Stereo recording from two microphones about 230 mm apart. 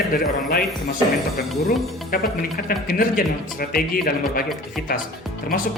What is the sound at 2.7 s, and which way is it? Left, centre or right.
Speech, left.